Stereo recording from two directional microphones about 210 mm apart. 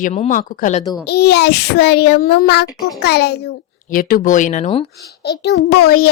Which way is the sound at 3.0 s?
50° left (ahead or behind).